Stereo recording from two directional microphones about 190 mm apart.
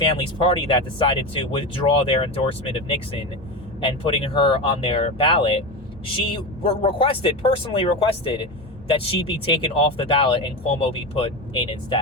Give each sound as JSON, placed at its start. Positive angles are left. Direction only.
{"t": 0.2, "sound": "speech", "side_deg": 25}